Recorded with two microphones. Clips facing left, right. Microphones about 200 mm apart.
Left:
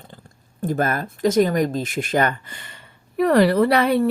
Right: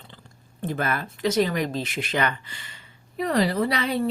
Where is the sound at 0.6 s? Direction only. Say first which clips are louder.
Left 5 dB; 45° left (ahead or behind).